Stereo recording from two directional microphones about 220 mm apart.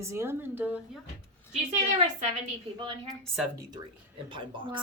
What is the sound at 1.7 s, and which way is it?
Speech, 35° right (ahead or behind).